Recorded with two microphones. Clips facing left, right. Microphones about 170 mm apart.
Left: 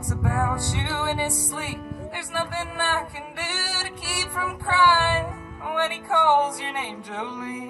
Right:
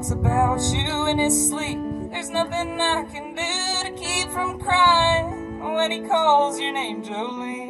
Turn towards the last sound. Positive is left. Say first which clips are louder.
# right 2 dB
turn(degrees=-25)  # may be behind; listen again after turning